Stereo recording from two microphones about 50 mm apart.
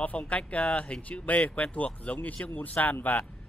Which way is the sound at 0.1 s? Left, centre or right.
Left.